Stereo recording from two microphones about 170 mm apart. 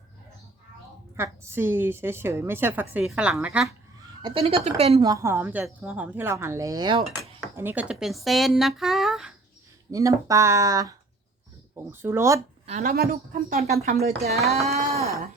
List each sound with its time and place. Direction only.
1.1 s a woman's voice: 15° right (ahead or behind)
4.2 s speech: 35° right (ahead or behind)
4.9 s a woman's voice: 20° right (ahead or behind)
7.5 s speech: 10° right (ahead or behind)
9.9 s a woman's voice: 20° right (ahead or behind)
12.8 s speech: 60° right (ahead or behind); by 13.7 s 45° right (ahead or behind)
13.8 s speech: 65° right (ahead or behind)
14.1 s speech: 40° right (ahead or behind)
14.8 s a sound: 40° right (ahead or behind)